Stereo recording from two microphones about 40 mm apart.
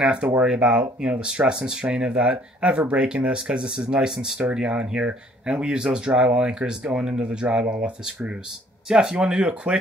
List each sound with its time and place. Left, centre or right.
0.0 s speech: right